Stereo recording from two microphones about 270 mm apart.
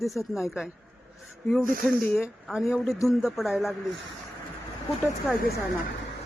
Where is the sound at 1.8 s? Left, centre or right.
Centre.